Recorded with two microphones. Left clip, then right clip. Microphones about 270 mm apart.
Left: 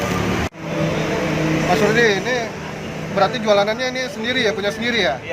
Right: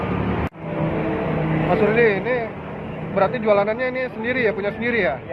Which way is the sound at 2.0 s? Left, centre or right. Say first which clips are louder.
Left 1 dB; centre.